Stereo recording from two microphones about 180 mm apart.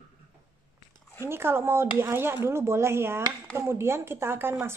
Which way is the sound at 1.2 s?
15° right (ahead or behind).